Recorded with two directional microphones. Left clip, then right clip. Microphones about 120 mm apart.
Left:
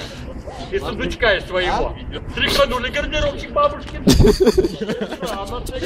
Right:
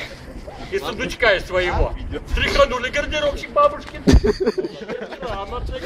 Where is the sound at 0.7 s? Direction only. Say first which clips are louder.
Even; 40° right (ahead or behind).